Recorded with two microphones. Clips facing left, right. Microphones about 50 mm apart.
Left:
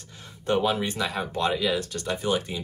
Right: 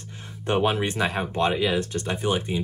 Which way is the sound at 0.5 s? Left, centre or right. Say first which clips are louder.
Right 1 dB; right.